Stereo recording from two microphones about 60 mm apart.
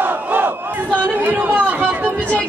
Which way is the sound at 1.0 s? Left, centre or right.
Right.